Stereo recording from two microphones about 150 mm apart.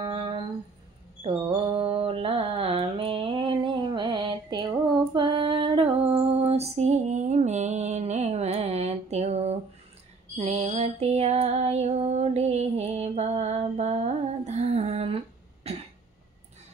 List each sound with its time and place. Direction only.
0.0 s a sound: 35° right (ahead or behind)
1.5 s mantra: 35° right (ahead or behind)
5.1 s female singing: 35° right (ahead or behind)